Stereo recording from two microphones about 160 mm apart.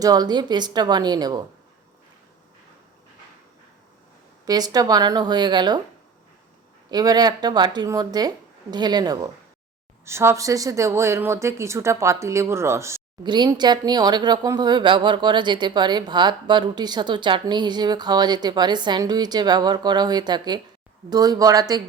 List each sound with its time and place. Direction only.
0.0 s speech: 25° right (ahead or behind)
4.4 s speech: 25° right (ahead or behind)
6.9 s speech: 25° right (ahead or behind)
13.2 s speech: 25° right (ahead or behind)